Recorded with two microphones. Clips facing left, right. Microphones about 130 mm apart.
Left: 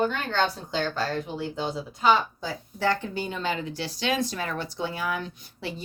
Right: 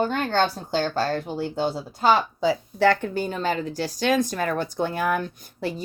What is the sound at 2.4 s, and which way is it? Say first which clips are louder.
Speech: right 8 dB; 75° right (ahead or behind).